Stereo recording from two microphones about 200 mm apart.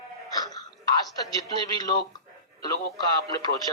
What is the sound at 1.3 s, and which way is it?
Speech, 20° left (ahead or behind).